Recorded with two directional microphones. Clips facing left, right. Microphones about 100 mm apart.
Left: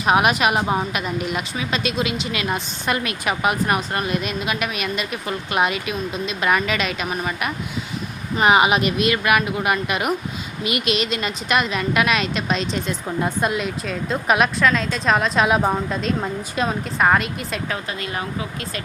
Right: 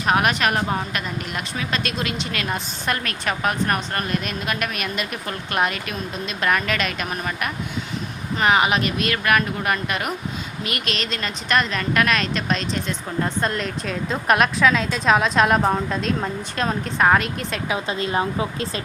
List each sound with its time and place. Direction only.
0.0 s a woman's voice: 10° left (ahead or behind)
8.4 s a woman's voice: 15° left (ahead or behind)
17.8 s speech: 25° right (ahead or behind)